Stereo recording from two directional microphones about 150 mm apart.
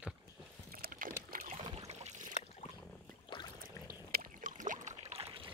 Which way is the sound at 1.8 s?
45° right (ahead or behind).